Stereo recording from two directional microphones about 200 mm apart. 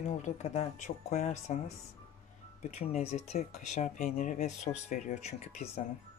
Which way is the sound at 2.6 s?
35° left (ahead or behind).